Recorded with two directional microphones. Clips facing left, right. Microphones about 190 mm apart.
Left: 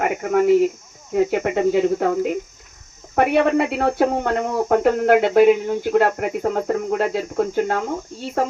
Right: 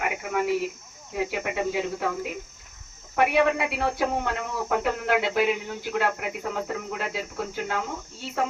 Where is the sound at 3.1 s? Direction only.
55° left (ahead or behind).